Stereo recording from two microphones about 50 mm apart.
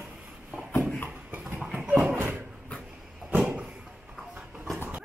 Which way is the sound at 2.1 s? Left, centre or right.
Right.